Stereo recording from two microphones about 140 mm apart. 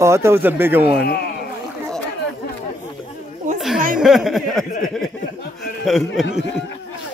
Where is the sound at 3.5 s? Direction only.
Centre (ahead or behind).